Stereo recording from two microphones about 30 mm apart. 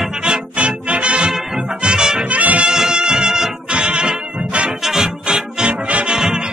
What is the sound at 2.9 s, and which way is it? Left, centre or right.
Music, right.